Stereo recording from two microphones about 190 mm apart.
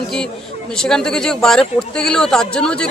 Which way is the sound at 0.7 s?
5° left (ahead or behind).